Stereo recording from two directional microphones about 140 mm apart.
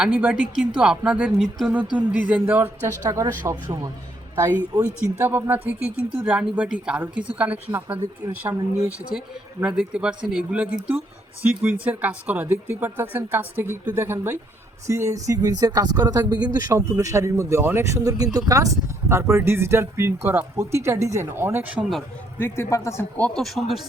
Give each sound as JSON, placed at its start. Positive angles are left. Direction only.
{"t": 0.0, "sound": "speech", "side_deg": -10}
{"t": 3.1, "sound": "speech", "side_deg": -25}
{"t": 9.6, "sound": "speech", "side_deg": -10}
{"t": 22.4, "sound": "a man's voice", "side_deg": 15}